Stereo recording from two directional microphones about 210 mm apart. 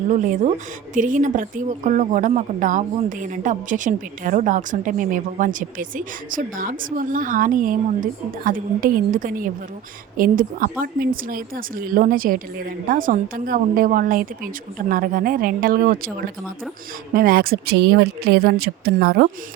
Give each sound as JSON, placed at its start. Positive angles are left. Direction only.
{"t": 0.1, "sound": "a woman's voice", "side_deg": -35}
{"t": 17.2, "sound": "speech", "side_deg": -45}